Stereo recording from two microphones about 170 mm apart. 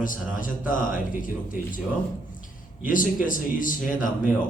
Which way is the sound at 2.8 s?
50° left (ahead or behind).